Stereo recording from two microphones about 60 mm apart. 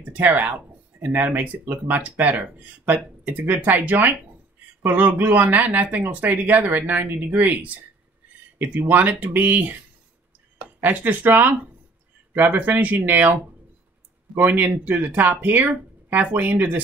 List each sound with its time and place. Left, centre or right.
0.1 s speech: right
10.8 s speech: right